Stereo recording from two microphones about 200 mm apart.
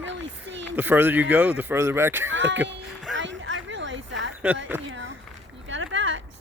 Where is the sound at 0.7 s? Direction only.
10° right (ahead or behind).